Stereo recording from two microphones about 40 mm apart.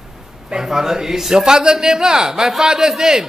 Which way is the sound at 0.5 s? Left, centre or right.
Centre.